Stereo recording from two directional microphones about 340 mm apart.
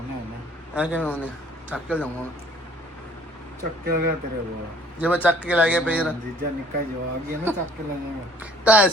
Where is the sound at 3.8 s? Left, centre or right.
Right.